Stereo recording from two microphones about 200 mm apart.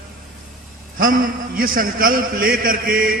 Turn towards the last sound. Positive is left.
turn(degrees=-45)  # may be behind; listen again after turning